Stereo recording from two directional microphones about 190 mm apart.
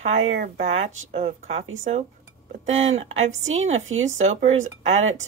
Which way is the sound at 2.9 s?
35° right (ahead or behind).